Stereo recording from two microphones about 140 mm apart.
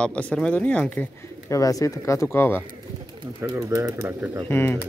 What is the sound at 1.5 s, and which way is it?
Speech, 25° left (ahead or behind).